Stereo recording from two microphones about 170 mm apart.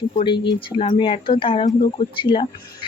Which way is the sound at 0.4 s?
30° left (ahead or behind).